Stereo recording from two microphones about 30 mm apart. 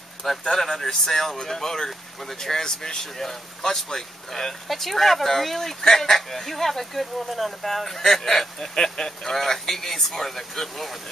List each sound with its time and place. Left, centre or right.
0.4 s speech: centre
2.6 s speech: left
3.2 s speech: centre
4.6 s speech: centre
7.9 s speech: centre